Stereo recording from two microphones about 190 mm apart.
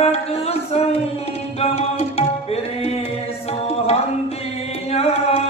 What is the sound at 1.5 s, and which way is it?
Music, 30° left (ahead or behind).